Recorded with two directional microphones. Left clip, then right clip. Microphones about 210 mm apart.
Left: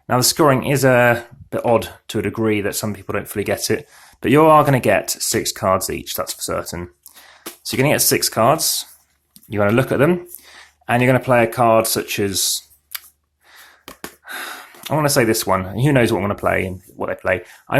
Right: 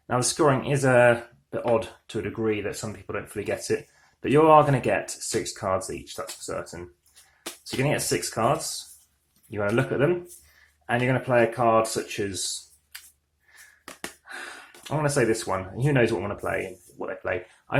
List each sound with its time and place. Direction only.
0.1 s speech: 35° left (ahead or behind)
13.9 s gasp: 20° left (ahead or behind)
14.3 s speech: 35° left (ahead or behind)